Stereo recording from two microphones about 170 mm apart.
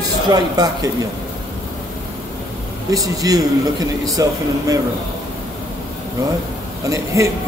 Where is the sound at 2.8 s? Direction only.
20° right (ahead or behind).